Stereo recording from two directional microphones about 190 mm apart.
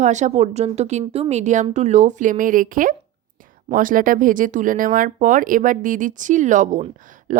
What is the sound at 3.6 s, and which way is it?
A woman's voice, 45° right (ahead or behind).